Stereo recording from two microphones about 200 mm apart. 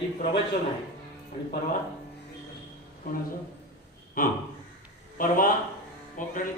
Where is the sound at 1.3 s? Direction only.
25° left (ahead or behind).